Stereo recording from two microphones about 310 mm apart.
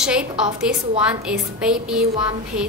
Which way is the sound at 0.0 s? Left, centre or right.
Centre.